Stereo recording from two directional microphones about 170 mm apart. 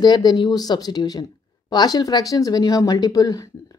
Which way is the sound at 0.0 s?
25° left (ahead or behind).